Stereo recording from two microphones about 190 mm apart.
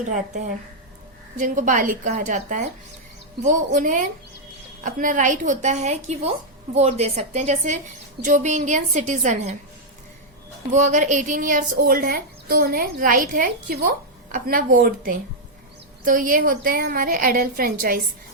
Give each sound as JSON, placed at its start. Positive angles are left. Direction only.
{"t": 0.0, "sound": "speech", "side_deg": -40}
{"t": 10.7, "sound": "speech", "side_deg": -40}